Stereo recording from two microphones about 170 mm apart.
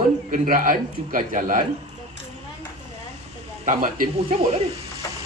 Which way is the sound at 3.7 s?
55° right (ahead or behind).